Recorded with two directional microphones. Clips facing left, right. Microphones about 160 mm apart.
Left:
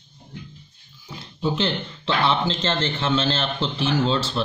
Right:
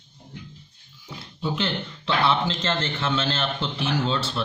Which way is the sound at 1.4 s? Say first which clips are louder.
Left 3 dB; 30° left (ahead or behind).